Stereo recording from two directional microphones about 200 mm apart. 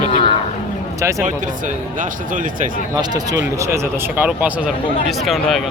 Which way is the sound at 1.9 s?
40° right (ahead or behind).